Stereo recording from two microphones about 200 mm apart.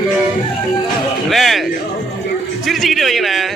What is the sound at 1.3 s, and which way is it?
Speech, centre (ahead or behind).